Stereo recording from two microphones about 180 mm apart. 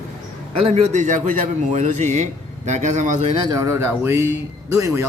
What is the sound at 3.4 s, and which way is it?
Speech, 20° right (ahead or behind).